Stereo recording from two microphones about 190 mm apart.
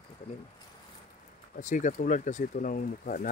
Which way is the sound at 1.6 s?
45° left (ahead or behind).